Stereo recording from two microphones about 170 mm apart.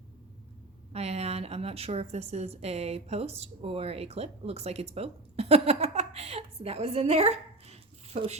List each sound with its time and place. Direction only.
0.9 s a woman's voice: 40° right (ahead or behind)